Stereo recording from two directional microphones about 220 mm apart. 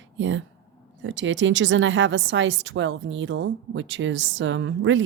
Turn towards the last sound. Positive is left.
turn(degrees=-55)  # may be behind; listen again after turning